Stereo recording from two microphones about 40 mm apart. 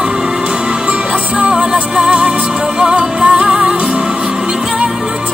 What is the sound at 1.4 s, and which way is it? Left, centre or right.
Music, centre.